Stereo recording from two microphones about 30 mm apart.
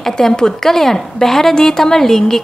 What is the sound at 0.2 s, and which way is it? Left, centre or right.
A woman's voice, centre.